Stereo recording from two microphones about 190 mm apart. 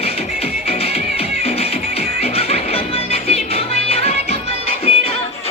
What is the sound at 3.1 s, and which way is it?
Music, 30° left (ahead or behind).